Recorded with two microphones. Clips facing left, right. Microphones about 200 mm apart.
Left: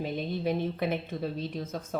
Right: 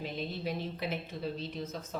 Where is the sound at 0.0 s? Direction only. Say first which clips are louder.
Left 6 dB; 55° left (ahead or behind).